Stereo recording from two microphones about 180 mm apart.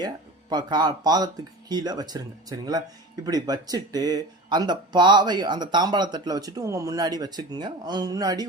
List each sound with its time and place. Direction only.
0.5 s speech: 25° right (ahead or behind)